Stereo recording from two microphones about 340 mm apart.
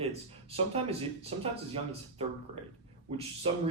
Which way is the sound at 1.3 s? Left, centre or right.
Centre.